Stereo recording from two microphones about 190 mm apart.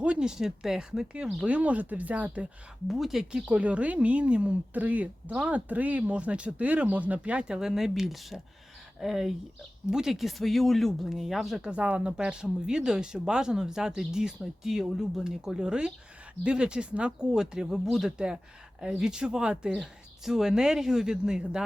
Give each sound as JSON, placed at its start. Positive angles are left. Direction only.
{"t": 0.0, "sound": "speech", "side_deg": -5}